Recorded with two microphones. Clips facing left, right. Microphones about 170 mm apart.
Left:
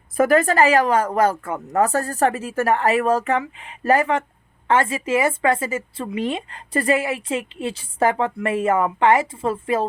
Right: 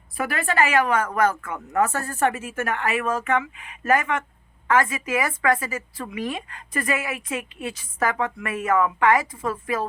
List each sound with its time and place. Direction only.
0.2 s speech: 40° left (ahead or behind)